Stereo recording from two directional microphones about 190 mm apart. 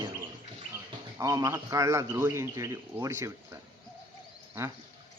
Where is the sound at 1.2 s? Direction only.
20° right (ahead or behind).